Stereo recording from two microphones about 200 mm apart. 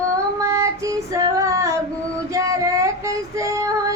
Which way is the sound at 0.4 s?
15° right (ahead or behind).